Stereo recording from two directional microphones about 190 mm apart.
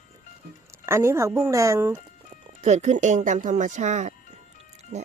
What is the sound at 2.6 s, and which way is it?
Speech, 35° right (ahead or behind).